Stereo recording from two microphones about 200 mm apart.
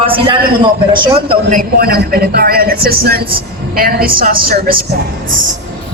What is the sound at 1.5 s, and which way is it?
Speech, 45° right (ahead or behind).